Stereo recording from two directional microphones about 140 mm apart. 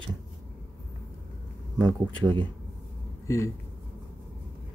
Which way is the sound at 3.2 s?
20° left (ahead or behind).